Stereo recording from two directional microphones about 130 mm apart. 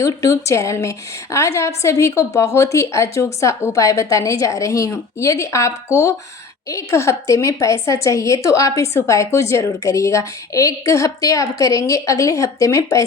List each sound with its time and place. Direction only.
0.0 s a woman's voice: 25° left (ahead or behind)